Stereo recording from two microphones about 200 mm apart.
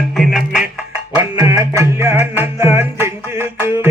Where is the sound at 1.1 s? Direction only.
20° right (ahead or behind).